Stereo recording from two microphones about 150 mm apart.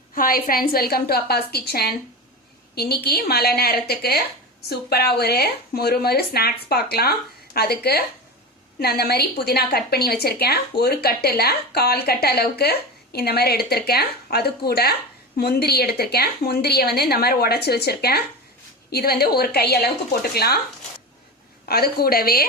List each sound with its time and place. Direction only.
0.1 s a woman's voice: 70° left (ahead or behind); by 20.6 s 90° left
21.7 s a woman's voice: 90° left